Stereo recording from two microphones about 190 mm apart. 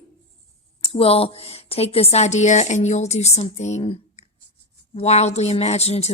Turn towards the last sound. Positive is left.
turn(degrees=35)  # may be behind; listen again after turning